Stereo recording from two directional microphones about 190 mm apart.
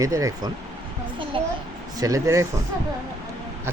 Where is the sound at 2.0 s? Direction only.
15° right (ahead or behind).